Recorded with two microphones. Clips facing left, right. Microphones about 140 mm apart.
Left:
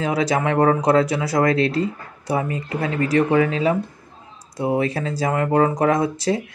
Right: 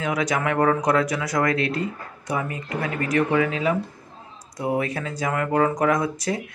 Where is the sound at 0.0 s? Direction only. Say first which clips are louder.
Left 4 dB; 30° left (ahead or behind).